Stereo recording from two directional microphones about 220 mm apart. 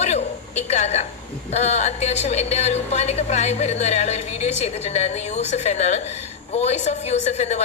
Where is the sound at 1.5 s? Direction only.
30° left (ahead or behind).